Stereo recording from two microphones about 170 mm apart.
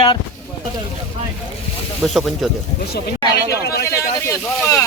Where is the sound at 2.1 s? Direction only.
Centre (ahead or behind).